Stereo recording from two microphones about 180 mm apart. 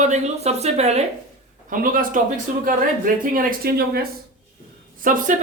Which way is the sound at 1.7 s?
50° right (ahead or behind).